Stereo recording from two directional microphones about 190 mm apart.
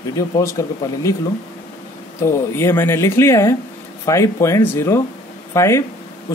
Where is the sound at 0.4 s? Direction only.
15° left (ahead or behind).